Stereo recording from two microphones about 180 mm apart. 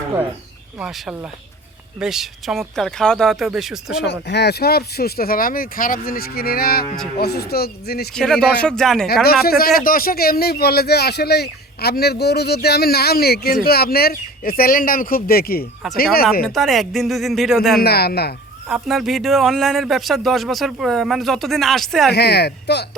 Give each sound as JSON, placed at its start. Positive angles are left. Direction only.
{"t": 0.8, "sound": "a man's voice", "side_deg": -5}
{"t": 4.0, "sound": "a man's voice", "side_deg": 70}
{"t": 8.1, "sound": "a man's voice", "side_deg": 5}
{"t": 9.2, "sound": "a man's voice", "side_deg": 60}
{"t": 16.5, "sound": "a man's voice", "side_deg": 0}
{"t": 17.7, "sound": "a man's voice", "side_deg": 60}
{"t": 18.7, "sound": "a man's voice", "side_deg": 0}
{"t": 22.1, "sound": "a man's voice", "side_deg": 65}